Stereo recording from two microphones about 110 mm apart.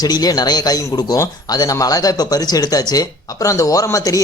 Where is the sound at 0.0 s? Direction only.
35° left (ahead or behind).